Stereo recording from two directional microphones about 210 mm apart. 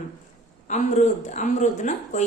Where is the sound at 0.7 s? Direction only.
35° left (ahead or behind).